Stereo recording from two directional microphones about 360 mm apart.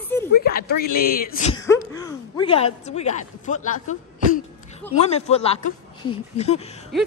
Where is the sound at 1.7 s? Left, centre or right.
Centre.